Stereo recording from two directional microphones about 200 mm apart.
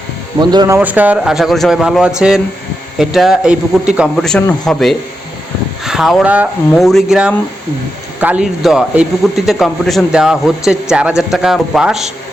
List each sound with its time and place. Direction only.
0.5 s speech: 20° right (ahead or behind)
0.8 s a man's voice: 10° right (ahead or behind)